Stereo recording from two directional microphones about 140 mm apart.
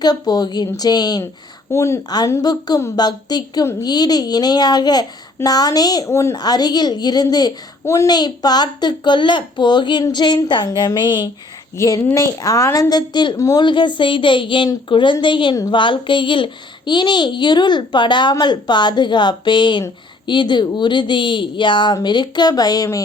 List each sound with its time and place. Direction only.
0.0 s a child's voice: 30° left (ahead or behind)
11.8 s a child's voice: 20° left (ahead or behind)